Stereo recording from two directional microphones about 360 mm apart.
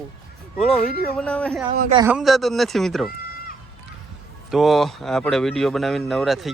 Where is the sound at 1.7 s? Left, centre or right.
Right.